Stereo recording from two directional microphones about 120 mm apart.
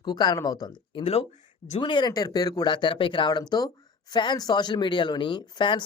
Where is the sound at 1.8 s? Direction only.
40° left (ahead or behind).